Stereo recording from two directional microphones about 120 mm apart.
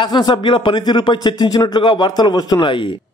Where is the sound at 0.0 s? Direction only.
35° left (ahead or behind).